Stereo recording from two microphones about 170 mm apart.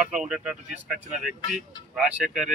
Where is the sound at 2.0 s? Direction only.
5° right (ahead or behind).